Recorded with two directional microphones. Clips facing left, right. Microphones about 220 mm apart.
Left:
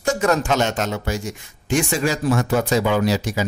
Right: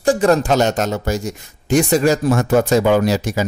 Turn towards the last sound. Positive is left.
turn(degrees=-45)  # may be behind; listen again after turning